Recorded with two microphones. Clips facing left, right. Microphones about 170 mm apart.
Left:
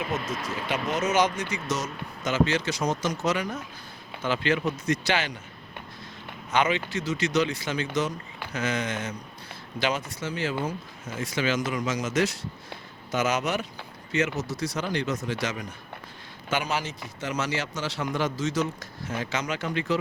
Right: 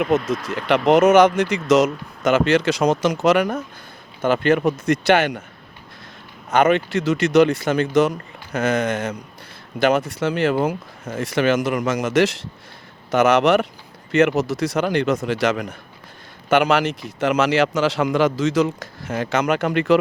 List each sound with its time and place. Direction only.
0.9 s speech: 60° right (ahead or behind)
1.4 s a man's voice: 75° right (ahead or behind)
4.2 s speech: 50° right (ahead or behind)
6.5 s a man's voice: 50° right (ahead or behind)